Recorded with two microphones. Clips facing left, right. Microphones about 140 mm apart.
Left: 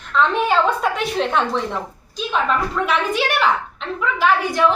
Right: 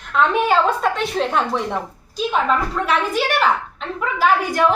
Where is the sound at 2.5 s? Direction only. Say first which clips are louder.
Even; 40° right (ahead or behind).